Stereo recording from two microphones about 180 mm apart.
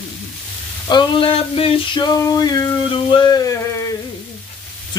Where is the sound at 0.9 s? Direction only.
25° left (ahead or behind).